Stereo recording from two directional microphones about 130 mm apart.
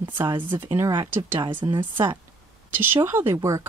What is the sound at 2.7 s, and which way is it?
Speech, 15° right (ahead or behind).